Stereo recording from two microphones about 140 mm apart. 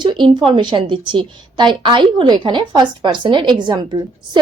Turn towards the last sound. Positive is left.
turn(degrees=-35)  # may be behind; listen again after turning